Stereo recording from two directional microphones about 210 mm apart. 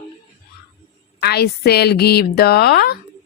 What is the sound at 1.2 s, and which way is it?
A woman's voice, 50° left (ahead or behind).